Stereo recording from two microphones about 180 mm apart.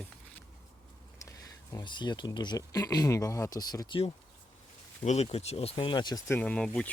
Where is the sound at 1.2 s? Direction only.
20° left (ahead or behind).